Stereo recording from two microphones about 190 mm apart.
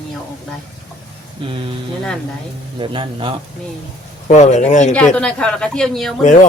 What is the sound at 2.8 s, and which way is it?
Speech, 25° right (ahead or behind).